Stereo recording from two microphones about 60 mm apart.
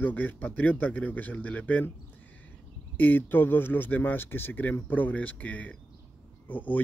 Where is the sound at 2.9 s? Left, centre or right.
Left.